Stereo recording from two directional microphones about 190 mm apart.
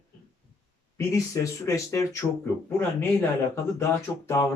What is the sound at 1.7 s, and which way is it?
Speech, 15° left (ahead or behind).